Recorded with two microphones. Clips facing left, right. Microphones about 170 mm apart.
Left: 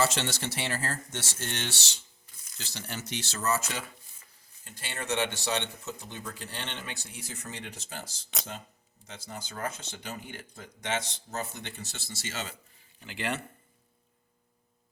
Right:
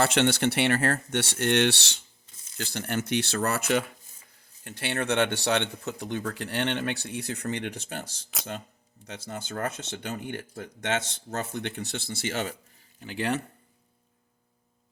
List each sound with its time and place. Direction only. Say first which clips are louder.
0.0 s speech: right 6 dB; 60° right (ahead or behind)